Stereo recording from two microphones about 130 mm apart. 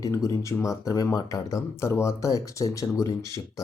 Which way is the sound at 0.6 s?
25° left (ahead or behind).